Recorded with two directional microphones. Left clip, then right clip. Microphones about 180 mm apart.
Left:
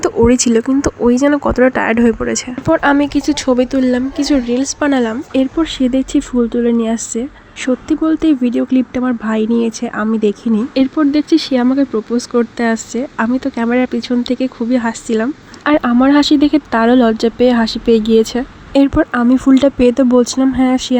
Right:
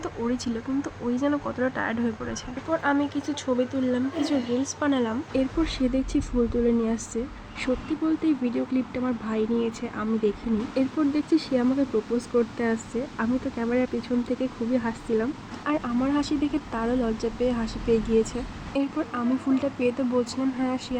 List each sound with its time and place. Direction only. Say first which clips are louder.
0.0 s speech: left 18 dB; 45° left (ahead or behind)